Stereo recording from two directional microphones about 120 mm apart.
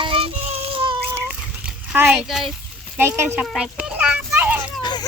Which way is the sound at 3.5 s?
5° right (ahead or behind).